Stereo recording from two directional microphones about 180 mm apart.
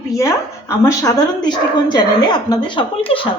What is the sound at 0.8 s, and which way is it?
Speech, 20° left (ahead or behind).